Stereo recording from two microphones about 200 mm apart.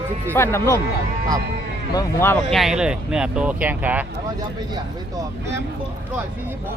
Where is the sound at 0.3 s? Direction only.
10° left (ahead or behind).